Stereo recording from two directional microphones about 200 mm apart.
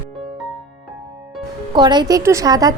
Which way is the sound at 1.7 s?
20° right (ahead or behind).